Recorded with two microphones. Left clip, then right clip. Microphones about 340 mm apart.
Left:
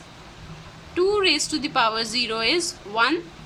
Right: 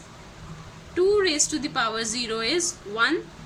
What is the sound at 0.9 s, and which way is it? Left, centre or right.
A woman's voice, centre.